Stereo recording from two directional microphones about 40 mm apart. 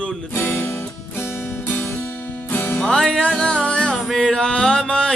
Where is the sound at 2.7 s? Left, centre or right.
Centre.